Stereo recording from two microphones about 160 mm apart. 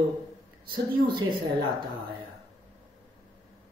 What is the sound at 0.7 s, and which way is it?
Speech, 30° right (ahead or behind).